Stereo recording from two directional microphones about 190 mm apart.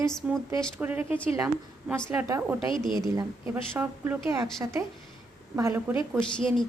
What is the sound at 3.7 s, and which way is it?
Speech, 10° right (ahead or behind).